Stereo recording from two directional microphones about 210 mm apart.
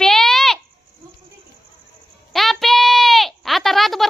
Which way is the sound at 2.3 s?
Centre (ahead or behind).